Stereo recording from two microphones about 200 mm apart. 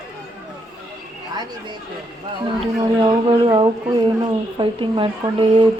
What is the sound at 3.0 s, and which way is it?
Speech, 25° right (ahead or behind).